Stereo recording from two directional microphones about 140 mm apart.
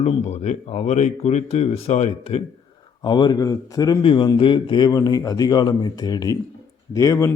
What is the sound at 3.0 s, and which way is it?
Speech, 30° left (ahead or behind).